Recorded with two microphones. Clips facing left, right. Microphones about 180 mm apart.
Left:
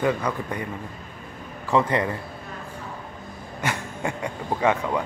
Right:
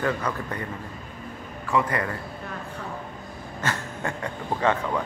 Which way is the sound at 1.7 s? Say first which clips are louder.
Left 3 dB; 25° left (ahead or behind).